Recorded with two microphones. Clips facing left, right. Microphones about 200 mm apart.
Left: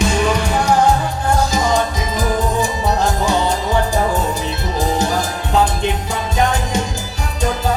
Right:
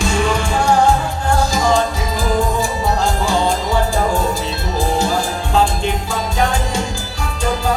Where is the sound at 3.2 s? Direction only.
20° left (ahead or behind).